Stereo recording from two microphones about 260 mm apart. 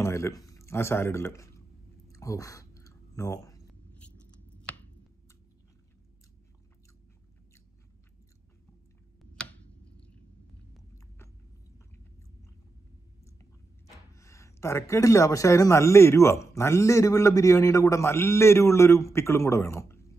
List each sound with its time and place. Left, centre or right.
0.0 s speech: centre
2.0 s a sound: centre
9.3 s tick-tock: centre
14.1 s speech: centre